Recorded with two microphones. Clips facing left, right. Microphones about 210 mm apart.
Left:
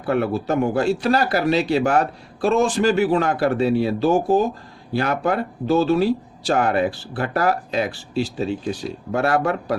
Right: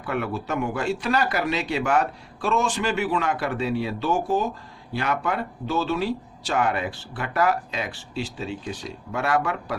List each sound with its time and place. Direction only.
0.0 s speech: 35° left (ahead or behind)